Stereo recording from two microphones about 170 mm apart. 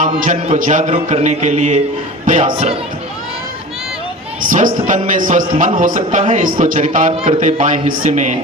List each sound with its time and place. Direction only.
0.0 s mantra: 45° right (ahead or behind)
4.4 s mantra: 50° right (ahead or behind)